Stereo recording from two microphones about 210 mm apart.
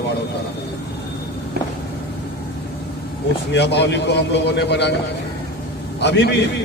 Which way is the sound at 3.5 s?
55° left (ahead or behind).